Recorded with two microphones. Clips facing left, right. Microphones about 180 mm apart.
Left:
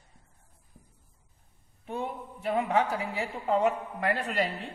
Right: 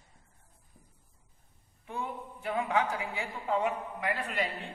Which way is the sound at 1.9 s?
30° left (ahead or behind).